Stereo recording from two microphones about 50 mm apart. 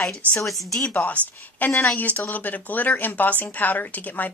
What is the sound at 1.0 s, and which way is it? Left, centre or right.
A woman's voice, left.